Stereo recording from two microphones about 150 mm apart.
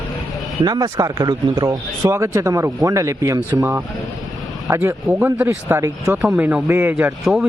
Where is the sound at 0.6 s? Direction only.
25° right (ahead or behind).